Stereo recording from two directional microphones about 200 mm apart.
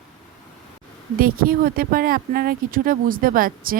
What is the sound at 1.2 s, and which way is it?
Speech, 45° right (ahead or behind).